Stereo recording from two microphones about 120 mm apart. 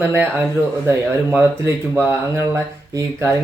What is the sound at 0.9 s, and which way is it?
Speech, 20° right (ahead or behind).